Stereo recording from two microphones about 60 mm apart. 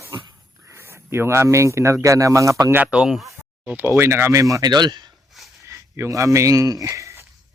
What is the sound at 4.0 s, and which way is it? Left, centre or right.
Speech, right.